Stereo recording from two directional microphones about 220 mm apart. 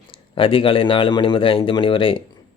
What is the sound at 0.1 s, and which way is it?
Speech, 25° left (ahead or behind).